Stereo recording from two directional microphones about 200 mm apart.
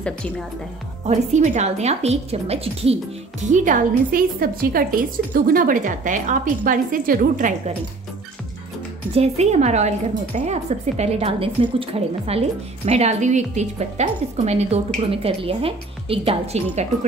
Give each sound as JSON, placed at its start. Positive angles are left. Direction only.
{"t": 1.0, "sound": "a woman's voice", "side_deg": -35}
{"t": 3.5, "sound": "a woman's voice", "side_deg": -40}
{"t": 9.1, "sound": "a woman's voice", "side_deg": -30}